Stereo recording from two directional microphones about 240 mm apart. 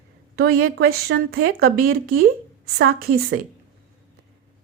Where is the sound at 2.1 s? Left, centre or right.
Right.